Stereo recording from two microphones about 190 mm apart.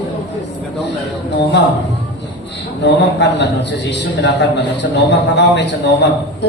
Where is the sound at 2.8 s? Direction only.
65° left (ahead or behind).